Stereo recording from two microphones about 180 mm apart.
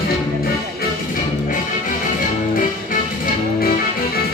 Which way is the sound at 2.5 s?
50° left (ahead or behind).